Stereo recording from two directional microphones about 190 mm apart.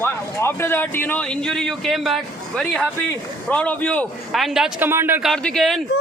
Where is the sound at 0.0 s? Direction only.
15° left (ahead or behind); by 5.3 s 10° right (ahead or behind).